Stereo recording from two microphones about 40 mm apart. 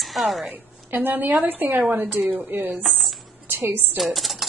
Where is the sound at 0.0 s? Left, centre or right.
Centre.